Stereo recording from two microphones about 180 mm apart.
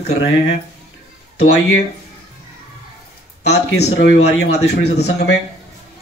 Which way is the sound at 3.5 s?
70° left (ahead or behind).